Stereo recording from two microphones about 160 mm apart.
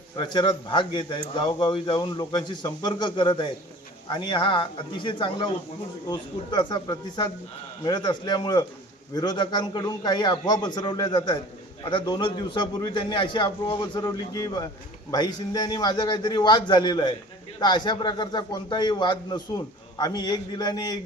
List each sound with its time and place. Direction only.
0.2 s a man's voice: 30° left (ahead or behind)